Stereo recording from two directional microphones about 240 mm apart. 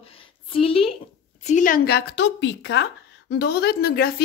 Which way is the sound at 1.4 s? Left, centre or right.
Left.